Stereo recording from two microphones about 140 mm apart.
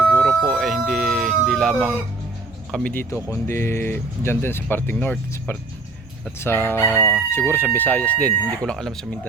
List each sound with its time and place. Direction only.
0.1 s emergency vehicle: 5° left (ahead or behind)
2.7 s chicken: 10° left (ahead or behind)